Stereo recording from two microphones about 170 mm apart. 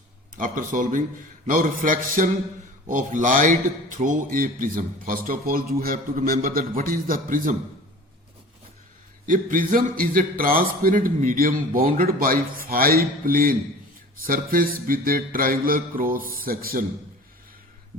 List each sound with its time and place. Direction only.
0.3 s a man's voice: 50° right (ahead or behind)
9.2 s a man's voice: 55° right (ahead or behind)